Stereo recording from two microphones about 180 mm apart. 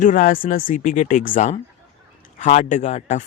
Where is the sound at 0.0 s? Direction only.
45° left (ahead or behind).